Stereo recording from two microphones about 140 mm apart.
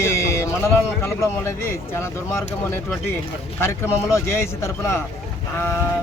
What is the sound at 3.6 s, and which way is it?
A man's voice, 20° left (ahead or behind).